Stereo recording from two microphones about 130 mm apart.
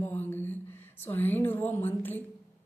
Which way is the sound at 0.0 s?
15° left (ahead or behind).